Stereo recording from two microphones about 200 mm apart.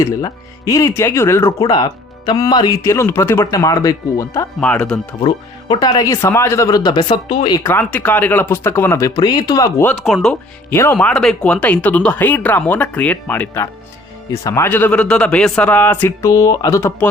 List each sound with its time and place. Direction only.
0.0 s speech: 15° left (ahead or behind)
4.6 s speech: 5° left (ahead or behind)
5.2 s speech: 20° left (ahead or behind)
7.6 s speech: 10° left (ahead or behind)
10.1 s speech: 5° left (ahead or behind)